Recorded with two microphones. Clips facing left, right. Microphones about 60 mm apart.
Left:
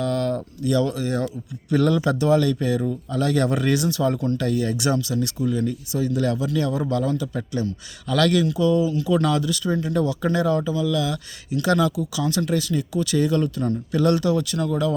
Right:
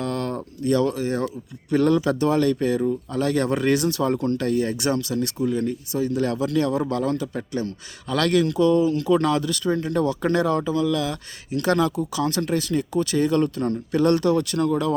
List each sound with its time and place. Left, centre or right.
0.0 s a sound: right
1.7 s speech: right
4.9 s speech: right
6.4 s speech: right
8.4 s speech: right
9.1 s speech: right
9.5 s speech: right